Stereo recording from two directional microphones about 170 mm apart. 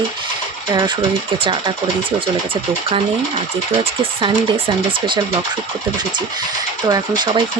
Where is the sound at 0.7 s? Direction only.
25° right (ahead or behind).